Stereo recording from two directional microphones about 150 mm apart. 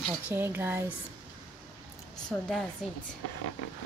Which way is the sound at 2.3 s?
10° left (ahead or behind).